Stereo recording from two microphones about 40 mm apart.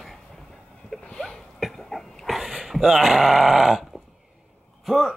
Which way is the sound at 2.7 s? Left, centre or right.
Centre.